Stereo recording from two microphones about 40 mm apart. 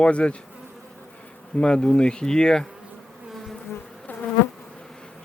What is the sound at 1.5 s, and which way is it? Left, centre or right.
Speech, left.